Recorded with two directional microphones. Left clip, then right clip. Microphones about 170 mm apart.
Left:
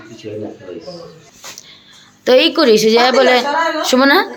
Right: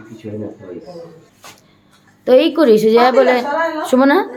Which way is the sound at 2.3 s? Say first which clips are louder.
Even; centre (ahead or behind).